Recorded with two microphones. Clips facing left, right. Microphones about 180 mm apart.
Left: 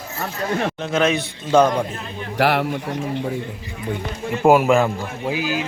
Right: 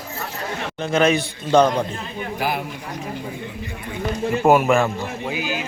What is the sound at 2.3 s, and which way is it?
Speech, 75° left (ahead or behind).